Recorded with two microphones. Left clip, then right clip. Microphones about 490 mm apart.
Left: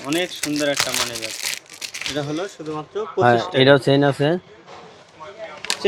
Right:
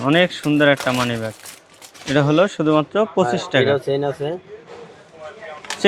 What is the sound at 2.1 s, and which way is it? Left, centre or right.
Speech, right.